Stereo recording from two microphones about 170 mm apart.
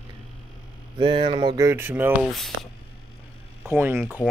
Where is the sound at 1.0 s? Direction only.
30° right (ahead or behind); by 2.3 s 15° right (ahead or behind).